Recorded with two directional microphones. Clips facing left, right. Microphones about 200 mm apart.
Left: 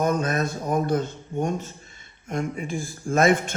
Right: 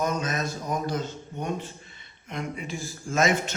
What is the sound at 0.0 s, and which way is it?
A man's voice, 55° left (ahead or behind).